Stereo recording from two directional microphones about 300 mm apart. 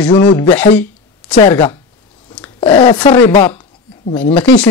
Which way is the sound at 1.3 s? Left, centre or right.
Centre.